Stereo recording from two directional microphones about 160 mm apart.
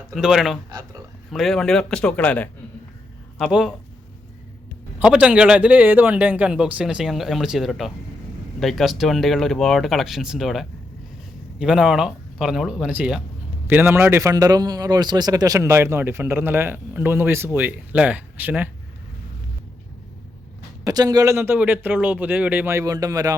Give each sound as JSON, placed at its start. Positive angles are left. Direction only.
{"t": 0.1, "sound": "speech", "side_deg": 0}
{"t": 4.9, "sound": "a man's voice", "side_deg": -10}
{"t": 20.8, "sound": "a man's voice", "side_deg": -25}